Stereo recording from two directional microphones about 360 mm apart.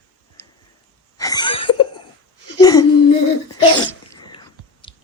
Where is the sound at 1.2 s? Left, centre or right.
Centre.